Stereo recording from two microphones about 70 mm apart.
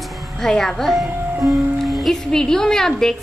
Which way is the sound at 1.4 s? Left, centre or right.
Right.